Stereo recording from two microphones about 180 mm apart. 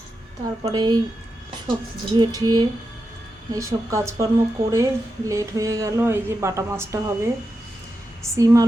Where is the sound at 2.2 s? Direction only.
20° right (ahead or behind).